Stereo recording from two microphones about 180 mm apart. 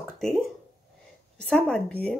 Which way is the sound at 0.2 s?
Centre (ahead or behind).